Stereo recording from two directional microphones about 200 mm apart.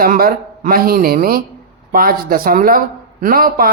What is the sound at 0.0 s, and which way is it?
A man's voice, 45° right (ahead or behind).